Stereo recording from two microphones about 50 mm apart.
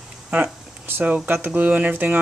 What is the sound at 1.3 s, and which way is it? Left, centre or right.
Speech, right.